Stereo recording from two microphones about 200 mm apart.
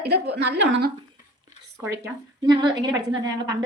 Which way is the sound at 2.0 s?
20° right (ahead or behind).